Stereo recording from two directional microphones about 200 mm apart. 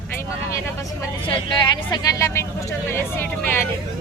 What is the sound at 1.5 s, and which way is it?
Speech, 20° left (ahead or behind).